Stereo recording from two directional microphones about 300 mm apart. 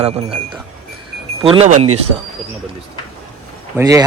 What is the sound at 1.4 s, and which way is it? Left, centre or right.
Speech, centre.